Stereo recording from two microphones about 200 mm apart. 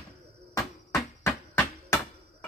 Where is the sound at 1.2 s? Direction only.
15° left (ahead or behind).